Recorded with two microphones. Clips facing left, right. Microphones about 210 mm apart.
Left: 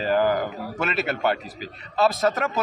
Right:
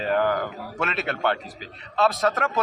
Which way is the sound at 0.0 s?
5° left (ahead or behind).